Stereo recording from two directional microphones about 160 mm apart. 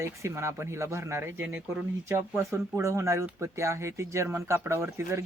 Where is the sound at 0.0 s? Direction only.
15° right (ahead or behind).